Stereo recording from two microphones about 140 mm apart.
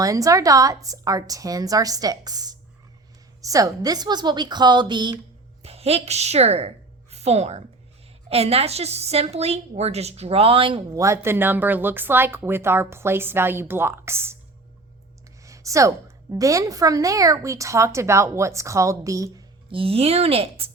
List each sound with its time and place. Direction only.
0.0 s a woman's voice: 25° right (ahead or behind)
5.6 s a woman's voice: 45° right (ahead or behind)
10.9 s speech: 20° right (ahead or behind)
15.4 s a woman's voice: 25° right (ahead or behind)
19.7 s a woman's voice: 40° right (ahead or behind)